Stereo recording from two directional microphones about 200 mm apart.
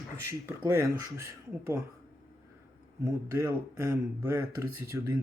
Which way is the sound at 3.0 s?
15° right (ahead or behind).